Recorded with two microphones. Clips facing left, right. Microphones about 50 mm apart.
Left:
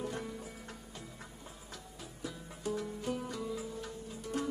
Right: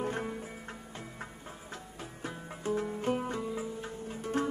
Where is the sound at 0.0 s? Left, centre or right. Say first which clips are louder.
Right 5 dB; right.